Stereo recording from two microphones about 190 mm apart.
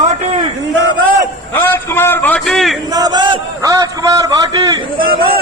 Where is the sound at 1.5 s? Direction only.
10° left (ahead or behind).